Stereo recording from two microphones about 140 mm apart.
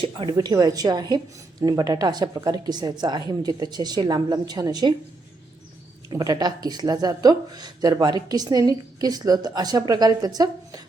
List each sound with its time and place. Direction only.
0.0 s speech: 35° right (ahead or behind)
6.1 s speech: 30° right (ahead or behind)